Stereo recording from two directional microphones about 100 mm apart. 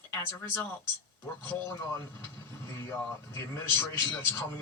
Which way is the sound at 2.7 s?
25° left (ahead or behind).